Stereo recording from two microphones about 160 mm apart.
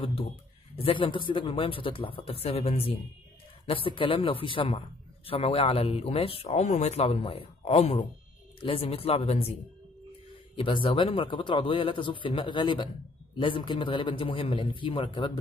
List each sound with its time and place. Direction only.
0.0 s a man's voice: 35° left (ahead or behind)
10.5 s a man's voice: 35° left (ahead or behind)